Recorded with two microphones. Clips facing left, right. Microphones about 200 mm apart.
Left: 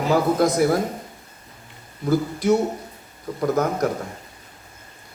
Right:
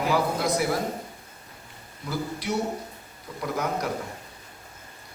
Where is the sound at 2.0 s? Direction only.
45° left (ahead or behind).